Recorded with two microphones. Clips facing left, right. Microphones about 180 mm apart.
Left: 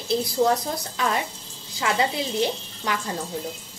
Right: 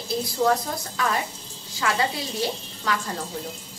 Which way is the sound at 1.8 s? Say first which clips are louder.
Left 1 dB; 20° left (ahead or behind).